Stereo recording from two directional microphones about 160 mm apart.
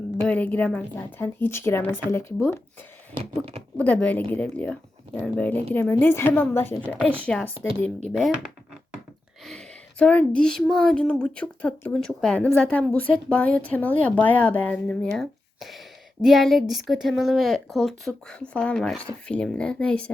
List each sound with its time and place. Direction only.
0.2 s speech: 10° left (ahead or behind)
3.2 s speech: 40° right (ahead or behind)
3.8 s speech: 10° left (ahead or behind)
6.9 s a woman's voice: 10° right (ahead or behind)
7.3 s speech: 10° left (ahead or behind)
8.1 s speech: centre (ahead or behind)
9.5 s speech: 5° left (ahead or behind)